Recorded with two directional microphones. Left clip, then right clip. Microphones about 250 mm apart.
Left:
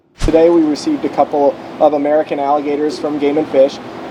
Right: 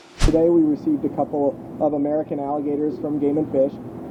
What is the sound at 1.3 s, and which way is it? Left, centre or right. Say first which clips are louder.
Speech: left 9 dB; left.